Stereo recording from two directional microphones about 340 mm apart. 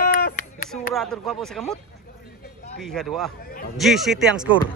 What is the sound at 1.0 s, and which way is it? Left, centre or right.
Speech, centre.